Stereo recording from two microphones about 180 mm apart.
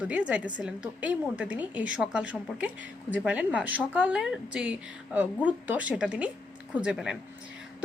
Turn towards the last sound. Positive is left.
turn(degrees=-5)  # may be behind; listen again after turning